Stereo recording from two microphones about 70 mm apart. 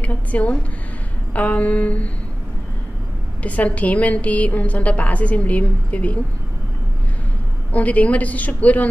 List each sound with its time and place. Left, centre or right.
0.0 s a sound: left
1.3 s a woman's voice: left
3.4 s a woman's voice: left
7.7 s a woman's voice: left